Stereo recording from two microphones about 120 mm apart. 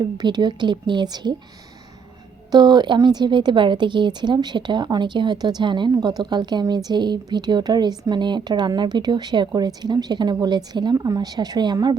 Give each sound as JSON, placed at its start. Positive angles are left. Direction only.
{"t": 0.0, "sound": "a woman's voice", "side_deg": -35}
{"t": 2.5, "sound": "a woman's voice", "side_deg": -35}